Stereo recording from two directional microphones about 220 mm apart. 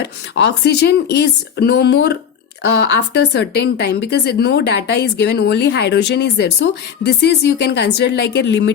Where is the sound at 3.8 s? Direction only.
50° left (ahead or behind).